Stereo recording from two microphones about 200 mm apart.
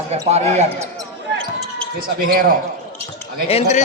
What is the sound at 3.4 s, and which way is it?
Speech, 30° left (ahead or behind).